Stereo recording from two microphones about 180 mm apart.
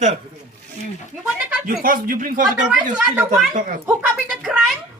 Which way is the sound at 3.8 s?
5° right (ahead or behind).